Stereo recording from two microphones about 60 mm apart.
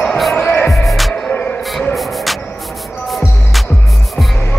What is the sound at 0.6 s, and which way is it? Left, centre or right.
Music, centre.